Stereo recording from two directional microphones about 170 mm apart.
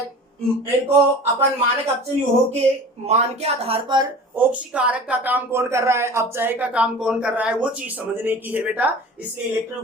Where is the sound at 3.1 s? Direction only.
40° right (ahead or behind).